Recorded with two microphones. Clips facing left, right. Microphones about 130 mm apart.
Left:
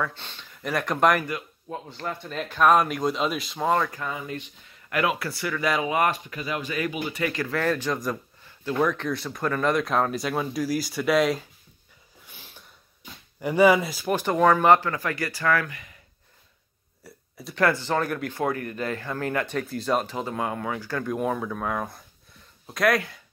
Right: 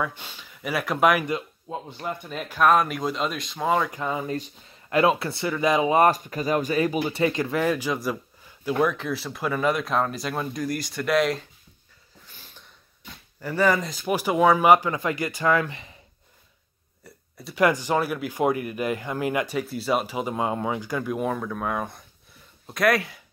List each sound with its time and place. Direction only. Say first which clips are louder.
0.0 s speech: right 1 dB; 10° right (ahead or behind)
1.2 s speech: right 4 dB; 20° right (ahead or behind); by 3.9 s 5° right (ahead or behind)
3.9 s speech: right 4 dB; 20° right (ahead or behind)
4.2 s speech: right 5 dB; 35° right (ahead or behind); by 11.4 s centre (ahead or behind)
12.3 s a sound: left 2 dB; 10° left (ahead or behind)
13.4 s speech: left 4 dB; 15° left (ahead or behind)
14.1 s speech: right 1 dB; 10° right (ahead or behind); by 16.0 s 25° right (ahead or behind)
17.0 s a sound: left 1 dB; centre (ahead or behind)
17.6 s speech: right 2 dB; 15° right (ahead or behind)